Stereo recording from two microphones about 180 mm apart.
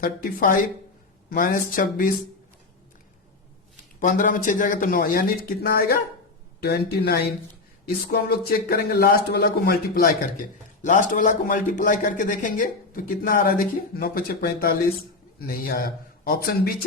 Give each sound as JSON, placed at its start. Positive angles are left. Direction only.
{"t": 0.0, "sound": "a man's voice", "side_deg": 50}
{"t": 4.0, "sound": "a man's voice", "side_deg": 50}